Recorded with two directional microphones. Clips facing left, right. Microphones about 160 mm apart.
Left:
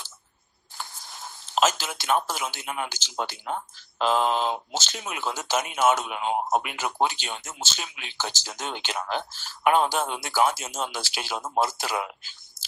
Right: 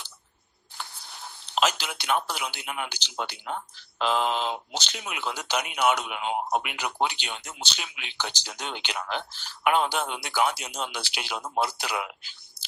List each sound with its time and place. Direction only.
0.8 s speech: 40° left (ahead or behind)